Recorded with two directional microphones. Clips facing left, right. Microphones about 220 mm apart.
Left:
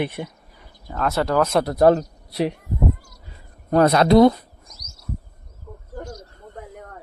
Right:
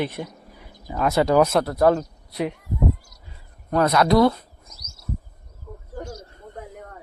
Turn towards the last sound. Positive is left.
turn(degrees=-10)  # may be behind; listen again after turning